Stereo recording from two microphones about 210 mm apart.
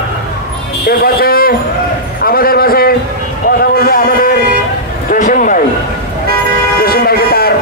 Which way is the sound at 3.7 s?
45° left (ahead or behind).